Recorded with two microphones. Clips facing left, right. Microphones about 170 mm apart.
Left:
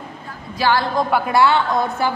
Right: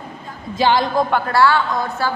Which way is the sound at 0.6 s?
20° right (ahead or behind).